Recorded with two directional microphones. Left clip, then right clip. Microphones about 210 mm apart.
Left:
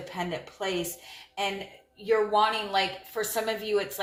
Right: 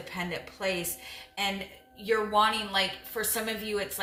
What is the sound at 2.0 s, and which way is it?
Speech, 15° left (ahead or behind).